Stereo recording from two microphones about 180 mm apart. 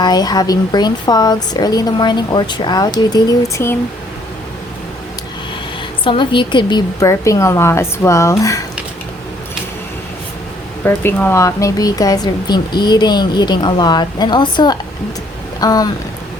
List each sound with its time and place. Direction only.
0.0 s speech: 20° left (ahead or behind)
6.1 s a woman's voice: 25° left (ahead or behind)
10.8 s speech: 10° left (ahead or behind)